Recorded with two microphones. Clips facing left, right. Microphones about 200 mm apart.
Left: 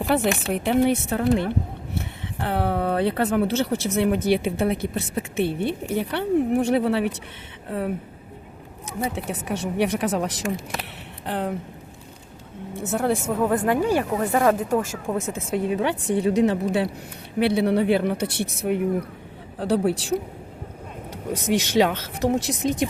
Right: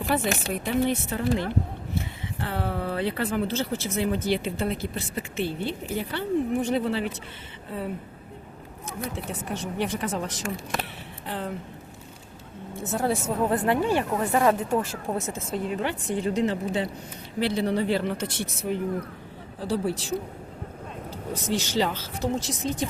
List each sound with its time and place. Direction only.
0.1 s speech: 60° left (ahead or behind)
9.0 s a woman's voice: 70° left (ahead or behind)
12.7 s speech: 60° left (ahead or behind); by 15.1 s 45° left (ahead or behind)
15.3 s a woman's voice: 65° left (ahead or behind)
21.3 s a woman's voice: 70° left (ahead or behind)